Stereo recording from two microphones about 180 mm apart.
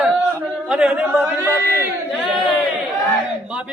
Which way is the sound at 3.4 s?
5° right (ahead or behind).